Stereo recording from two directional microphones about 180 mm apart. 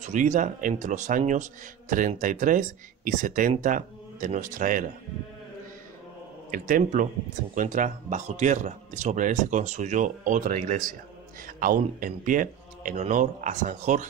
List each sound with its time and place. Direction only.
0.0 s speech: 45° right (ahead or behind)
6.5 s speech: 50° right (ahead or behind)